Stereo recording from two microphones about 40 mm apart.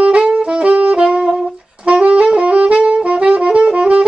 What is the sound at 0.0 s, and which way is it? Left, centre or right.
Saxophone, right.